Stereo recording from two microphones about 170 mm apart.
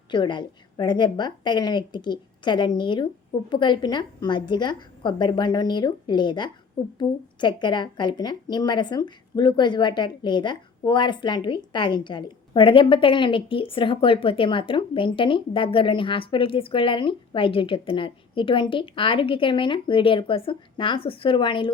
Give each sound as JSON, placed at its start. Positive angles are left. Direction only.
{"t": 0.1, "sound": "speech", "side_deg": 25}